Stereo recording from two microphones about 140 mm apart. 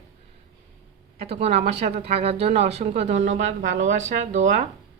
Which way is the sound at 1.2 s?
45° right (ahead or behind).